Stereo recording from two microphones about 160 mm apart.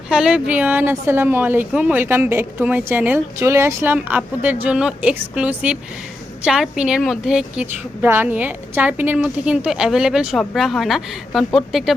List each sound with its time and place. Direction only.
0.1 s a woman's voice: 5° right (ahead or behind)